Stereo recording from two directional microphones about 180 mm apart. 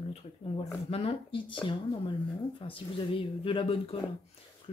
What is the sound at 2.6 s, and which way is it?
Speech, 30° left (ahead or behind).